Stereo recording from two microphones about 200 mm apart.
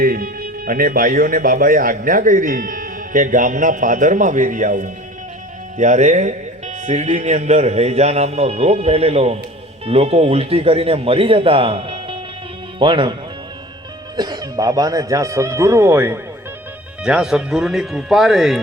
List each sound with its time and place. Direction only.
0.0 s speech: 45° right (ahead or behind); by 13.1 s 25° right (ahead or behind)
14.2 s speech: 20° right (ahead or behind); by 18.6 s centre (ahead or behind)